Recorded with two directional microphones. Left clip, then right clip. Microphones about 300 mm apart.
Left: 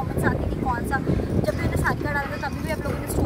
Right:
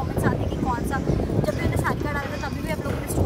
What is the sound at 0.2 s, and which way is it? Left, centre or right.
Vehicle, centre.